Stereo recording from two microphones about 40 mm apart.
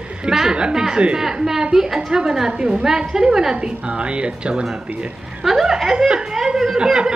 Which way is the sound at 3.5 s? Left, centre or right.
Right.